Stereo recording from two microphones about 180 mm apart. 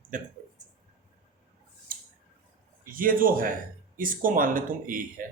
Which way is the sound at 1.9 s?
55° right (ahead or behind).